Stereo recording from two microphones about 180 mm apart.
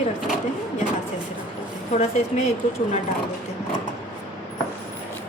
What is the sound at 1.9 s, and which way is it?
Speech, 40° left (ahead or behind).